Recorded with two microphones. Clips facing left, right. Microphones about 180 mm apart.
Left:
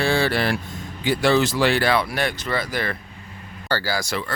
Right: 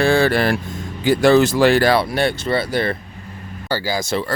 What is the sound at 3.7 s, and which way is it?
Speech, 15° right (ahead or behind).